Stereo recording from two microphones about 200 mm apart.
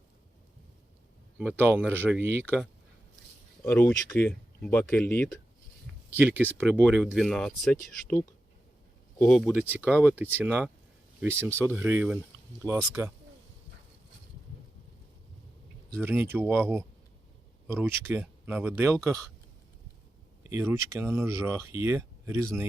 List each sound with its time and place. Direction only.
1.4 s speech: 10° right (ahead or behind)
3.6 s speech: 10° left (ahead or behind)
6.1 s speech: 10° right (ahead or behind)
16.0 s speech: 10° right (ahead or behind)
20.5 s speech: 15° right (ahead or behind)